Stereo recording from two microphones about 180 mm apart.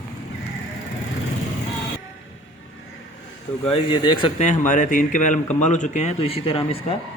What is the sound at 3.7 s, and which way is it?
Speech, 25° left (ahead or behind).